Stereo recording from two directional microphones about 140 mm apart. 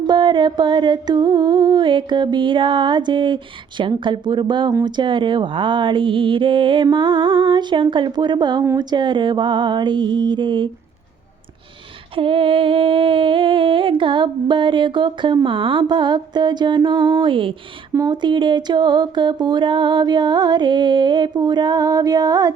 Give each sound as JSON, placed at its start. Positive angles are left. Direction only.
{"t": 0.1, "sound": "music", "side_deg": -35}
{"t": 12.1, "sound": "music", "side_deg": -40}